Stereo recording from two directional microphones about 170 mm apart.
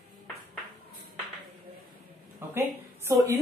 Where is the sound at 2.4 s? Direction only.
15° right (ahead or behind).